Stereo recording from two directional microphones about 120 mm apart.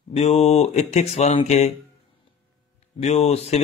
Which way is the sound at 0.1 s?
60° left (ahead or behind).